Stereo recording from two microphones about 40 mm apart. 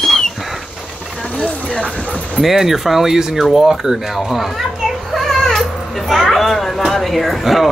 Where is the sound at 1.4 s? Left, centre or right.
Left.